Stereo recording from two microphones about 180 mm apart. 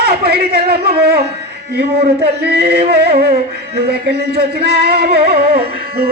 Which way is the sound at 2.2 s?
65° right (ahead or behind).